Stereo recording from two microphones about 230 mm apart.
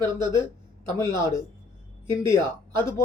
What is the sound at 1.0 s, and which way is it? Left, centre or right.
Speech, centre.